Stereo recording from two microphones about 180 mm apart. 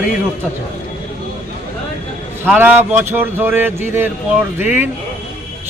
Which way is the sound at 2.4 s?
10° right (ahead or behind).